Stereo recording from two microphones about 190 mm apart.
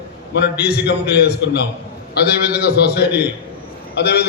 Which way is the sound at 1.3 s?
65° left (ahead or behind).